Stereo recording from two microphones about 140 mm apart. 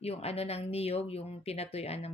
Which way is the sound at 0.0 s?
45° left (ahead or behind).